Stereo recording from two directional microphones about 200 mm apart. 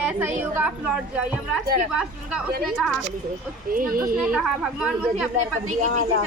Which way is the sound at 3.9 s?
45° right (ahead or behind).